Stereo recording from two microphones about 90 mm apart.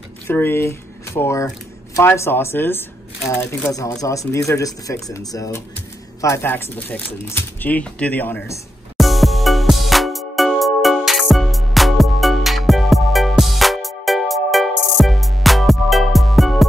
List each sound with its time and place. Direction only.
0.3 s speech: 25° left (ahead or behind)
6.5 s speech: 20° left (ahead or behind)
8.9 s music: centre (ahead or behind)